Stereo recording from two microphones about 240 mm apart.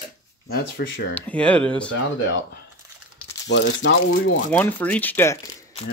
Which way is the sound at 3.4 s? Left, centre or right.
Left.